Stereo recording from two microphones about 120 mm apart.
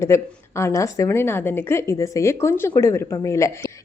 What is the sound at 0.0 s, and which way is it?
A woman's voice, 25° left (ahead or behind).